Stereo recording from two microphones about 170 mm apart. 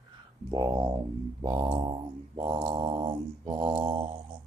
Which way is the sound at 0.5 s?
20° right (ahead or behind).